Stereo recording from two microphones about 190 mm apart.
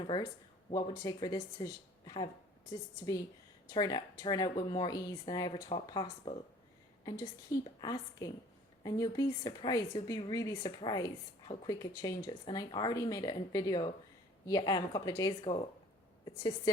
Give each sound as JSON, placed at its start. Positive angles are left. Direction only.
{"t": 0.0, "sound": "speech", "side_deg": 25}
{"t": 3.7, "sound": "a woman's voice", "side_deg": 20}